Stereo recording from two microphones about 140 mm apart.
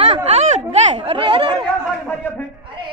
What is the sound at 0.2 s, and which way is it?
Chatter, 50° right (ahead or behind).